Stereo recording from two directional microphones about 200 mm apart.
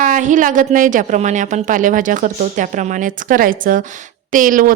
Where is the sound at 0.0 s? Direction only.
40° right (ahead or behind).